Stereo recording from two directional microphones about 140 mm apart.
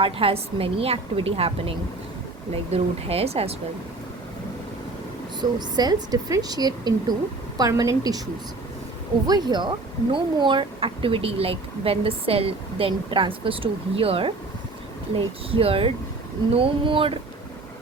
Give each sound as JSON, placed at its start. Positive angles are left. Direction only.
{"t": 0.0, "sound": "a woman's voice", "side_deg": -40}
{"t": 5.4, "sound": "a woman's voice", "side_deg": -30}
{"t": 9.2, "sound": "speech", "side_deg": -30}
{"t": 15.4, "sound": "speech", "side_deg": -40}